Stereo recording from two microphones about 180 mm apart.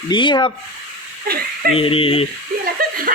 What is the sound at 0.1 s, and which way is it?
Speech, 25° left (ahead or behind).